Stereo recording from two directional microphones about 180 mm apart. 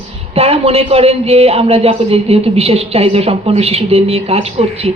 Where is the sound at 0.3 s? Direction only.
35° right (ahead or behind).